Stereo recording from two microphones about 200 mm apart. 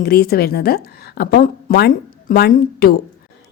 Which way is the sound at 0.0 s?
50° left (ahead or behind).